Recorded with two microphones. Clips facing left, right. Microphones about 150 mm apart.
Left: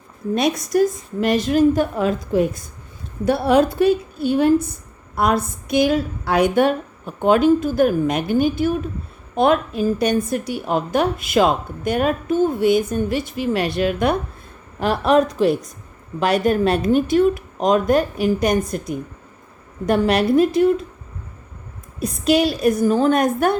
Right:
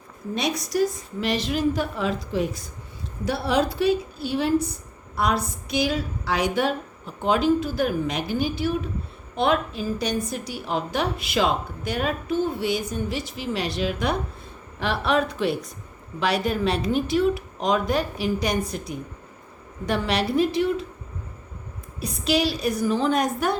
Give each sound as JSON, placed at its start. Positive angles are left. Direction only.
{"t": 0.3, "sound": "a woman's voice", "side_deg": 50}
{"t": 14.8, "sound": "a woman's voice", "side_deg": 45}
{"t": 19.8, "sound": "a woman's voice", "side_deg": 50}
{"t": 22.0, "sound": "a woman's voice", "side_deg": 45}